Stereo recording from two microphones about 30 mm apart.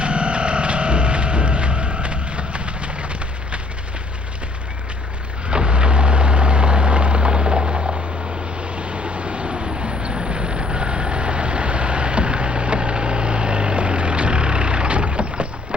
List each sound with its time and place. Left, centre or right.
0.0 s music: right
5.5 s vehicle: right
8.5 s vehicle: right
9.6 s vehicle: right